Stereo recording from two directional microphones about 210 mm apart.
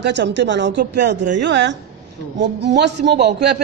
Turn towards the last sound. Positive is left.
turn(degrees=-55)  # may be behind; listen again after turning